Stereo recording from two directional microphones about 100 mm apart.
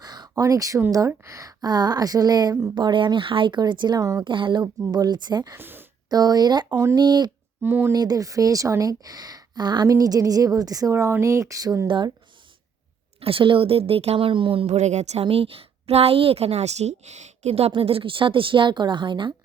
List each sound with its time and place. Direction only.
0.0 s a sound: 40° right (ahead or behind)
0.9 s speech: 30° right (ahead or behind)
1.6 s speech: 45° right (ahead or behind)
2.7 s speech: 50° right (ahead or behind)
4.2 s a woman's voice: 55° right (ahead or behind)
4.6 s speech: 40° right (ahead or behind)
5.5 s speech: 20° right (ahead or behind)
6.1 s speech: 40° right (ahead or behind)
7.6 s speech: 20° right (ahead or behind)
7.9 s speech: 40° right (ahead or behind)
11.9 s speech: 50° right (ahead or behind)
13.1 s a woman's voice: 65° right (ahead or behind); by 19.3 s 50° right (ahead or behind)